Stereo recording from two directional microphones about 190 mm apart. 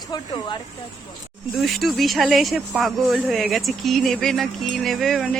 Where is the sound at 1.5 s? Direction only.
Centre (ahead or behind).